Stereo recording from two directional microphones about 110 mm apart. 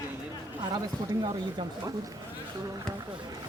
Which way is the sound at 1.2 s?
40° right (ahead or behind).